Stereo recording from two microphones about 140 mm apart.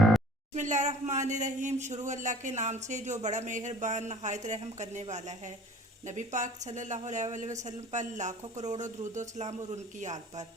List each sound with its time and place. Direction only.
0.5 s speech: 60° right (ahead or behind)